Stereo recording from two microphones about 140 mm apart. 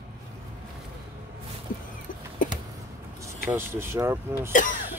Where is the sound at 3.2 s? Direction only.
20° right (ahead or behind).